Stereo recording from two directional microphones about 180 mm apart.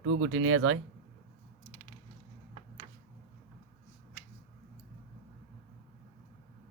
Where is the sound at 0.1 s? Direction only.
90° right.